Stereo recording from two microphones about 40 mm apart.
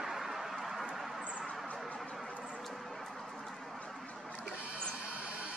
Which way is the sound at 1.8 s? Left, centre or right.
Left.